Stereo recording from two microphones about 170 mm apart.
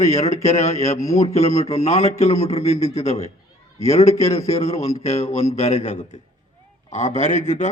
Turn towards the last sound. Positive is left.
turn(degrees=45)  # may be behind; listen again after turning